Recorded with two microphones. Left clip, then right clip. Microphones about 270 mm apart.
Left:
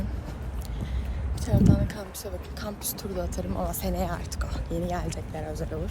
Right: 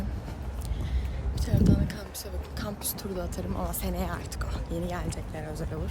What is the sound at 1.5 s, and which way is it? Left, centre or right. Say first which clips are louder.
Speech: left 3 dB; centre.